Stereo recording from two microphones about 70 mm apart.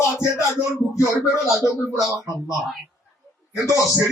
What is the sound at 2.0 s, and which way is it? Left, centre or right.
Speech, left.